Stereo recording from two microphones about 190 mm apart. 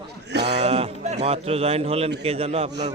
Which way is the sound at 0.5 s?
35° right (ahead or behind).